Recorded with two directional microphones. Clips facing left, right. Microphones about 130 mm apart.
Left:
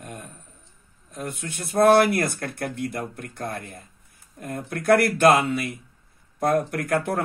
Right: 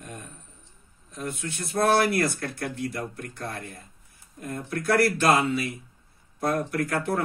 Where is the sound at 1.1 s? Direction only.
50° left (ahead or behind).